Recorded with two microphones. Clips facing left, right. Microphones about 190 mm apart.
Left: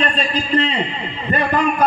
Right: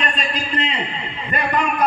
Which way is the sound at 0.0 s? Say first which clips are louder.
Left 4 dB; 30° left (ahead or behind).